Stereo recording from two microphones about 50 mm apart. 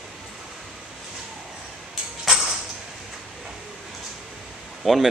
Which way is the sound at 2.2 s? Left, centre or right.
Centre.